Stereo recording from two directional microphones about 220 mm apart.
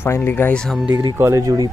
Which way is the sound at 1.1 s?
15° right (ahead or behind).